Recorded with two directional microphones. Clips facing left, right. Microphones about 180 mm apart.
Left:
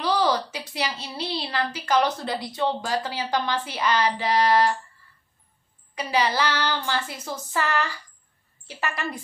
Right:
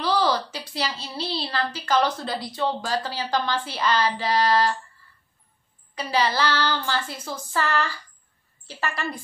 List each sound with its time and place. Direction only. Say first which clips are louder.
0.0 s a woman's voice: even; 15° left (ahead or behind)
5.9 s a woman's voice: even; 15° left (ahead or behind)